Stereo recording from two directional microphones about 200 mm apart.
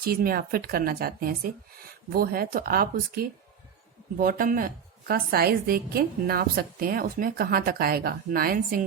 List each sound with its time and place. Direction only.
0.0 s a woman's voice: 50° right (ahead or behind)